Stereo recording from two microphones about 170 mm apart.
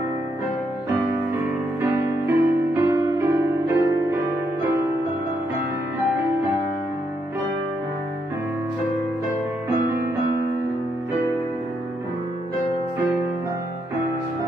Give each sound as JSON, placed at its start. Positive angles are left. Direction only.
{"t": 1.8, "sound": "music", "side_deg": -15}